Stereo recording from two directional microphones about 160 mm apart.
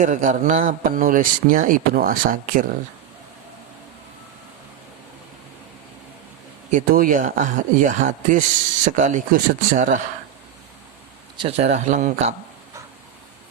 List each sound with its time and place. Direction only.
0.0 s speech: 55° right (ahead or behind)
6.7 s speech: 55° right (ahead or behind)
11.3 s speech: 40° right (ahead or behind)